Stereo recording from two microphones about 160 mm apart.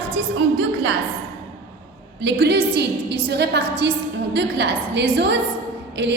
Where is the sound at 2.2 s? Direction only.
90° right.